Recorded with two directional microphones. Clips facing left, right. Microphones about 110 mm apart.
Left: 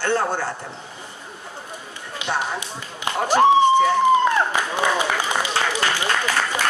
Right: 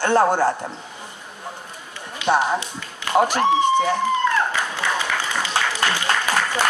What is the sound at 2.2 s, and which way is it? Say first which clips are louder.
Tap: right 8 dB; 20° left (ahead or behind).